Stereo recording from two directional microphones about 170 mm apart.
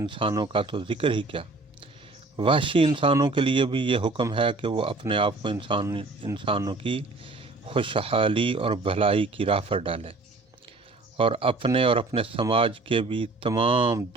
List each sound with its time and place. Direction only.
0.0 s speech: 30° right (ahead or behind)
11.2 s speech: 30° right (ahead or behind)